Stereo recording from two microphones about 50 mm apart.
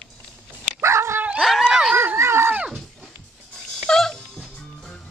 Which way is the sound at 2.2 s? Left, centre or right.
Right.